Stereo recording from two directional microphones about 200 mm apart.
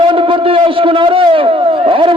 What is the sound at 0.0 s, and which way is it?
A man's voice, 25° right (ahead or behind).